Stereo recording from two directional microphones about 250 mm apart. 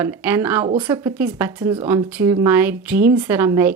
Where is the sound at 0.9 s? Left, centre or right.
Centre.